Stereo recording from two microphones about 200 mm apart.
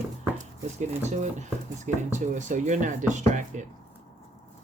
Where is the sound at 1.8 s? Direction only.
35° right (ahead or behind).